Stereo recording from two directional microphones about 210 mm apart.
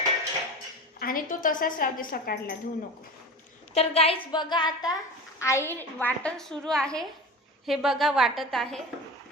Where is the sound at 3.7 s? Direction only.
30° left (ahead or behind); by 8.8 s centre (ahead or behind).